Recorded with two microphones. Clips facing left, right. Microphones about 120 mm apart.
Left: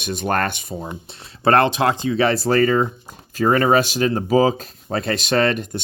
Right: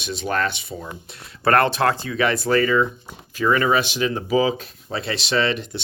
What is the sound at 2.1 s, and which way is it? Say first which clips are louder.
Speech: left 3 dB; 35° left (ahead or behind).